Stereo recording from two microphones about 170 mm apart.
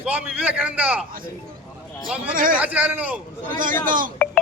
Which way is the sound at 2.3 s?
55° right (ahead or behind).